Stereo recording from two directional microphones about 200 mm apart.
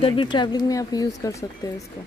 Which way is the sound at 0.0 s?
25° left (ahead or behind).